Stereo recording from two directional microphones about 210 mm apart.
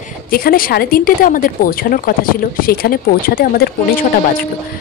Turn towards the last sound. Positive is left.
turn(degrees=45)  # may be behind; listen again after turning